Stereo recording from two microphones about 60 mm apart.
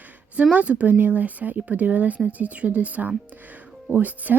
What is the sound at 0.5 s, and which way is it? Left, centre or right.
Speech, right.